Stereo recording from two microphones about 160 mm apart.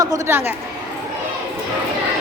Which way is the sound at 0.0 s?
20° right (ahead or behind).